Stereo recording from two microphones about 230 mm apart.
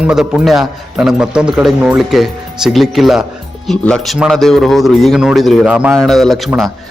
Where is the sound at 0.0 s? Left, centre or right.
Centre.